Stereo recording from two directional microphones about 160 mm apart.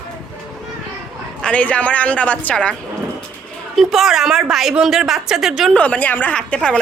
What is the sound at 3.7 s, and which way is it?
A woman's voice, centre (ahead or behind).